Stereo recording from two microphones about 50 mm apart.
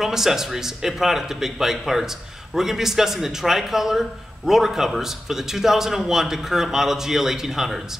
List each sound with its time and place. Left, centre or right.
0.0 s a man's voice: centre